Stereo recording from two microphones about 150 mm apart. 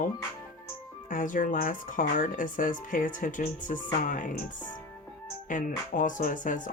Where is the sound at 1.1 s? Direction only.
60° left (ahead or behind).